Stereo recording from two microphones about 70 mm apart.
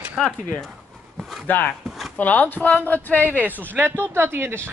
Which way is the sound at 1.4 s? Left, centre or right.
Left.